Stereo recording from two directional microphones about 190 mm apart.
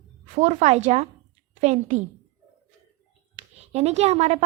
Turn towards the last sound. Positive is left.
turn(degrees=-35)  # may be behind; listen again after turning